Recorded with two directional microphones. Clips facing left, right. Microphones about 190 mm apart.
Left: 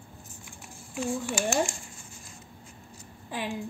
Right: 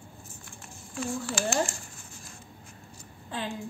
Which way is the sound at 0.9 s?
15° left (ahead or behind).